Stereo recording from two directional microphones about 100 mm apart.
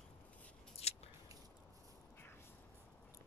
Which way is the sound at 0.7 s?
90° left.